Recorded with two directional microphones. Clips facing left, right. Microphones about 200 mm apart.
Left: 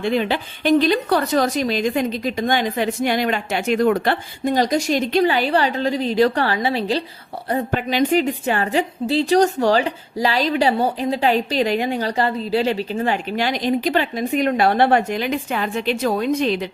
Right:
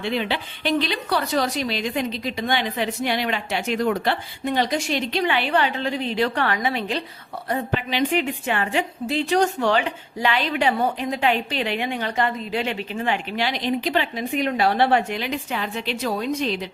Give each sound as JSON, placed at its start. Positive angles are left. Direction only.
{"t": 0.0, "sound": "a woman's voice", "side_deg": 45}
{"t": 7.5, "sound": "a woman's voice", "side_deg": 45}